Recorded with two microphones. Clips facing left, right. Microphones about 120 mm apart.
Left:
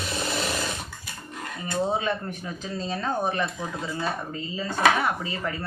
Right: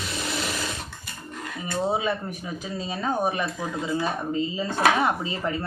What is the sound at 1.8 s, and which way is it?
Speech, 5° right (ahead or behind).